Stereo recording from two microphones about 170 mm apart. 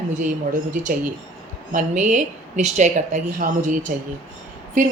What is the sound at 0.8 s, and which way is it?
Speech, 50° right (ahead or behind).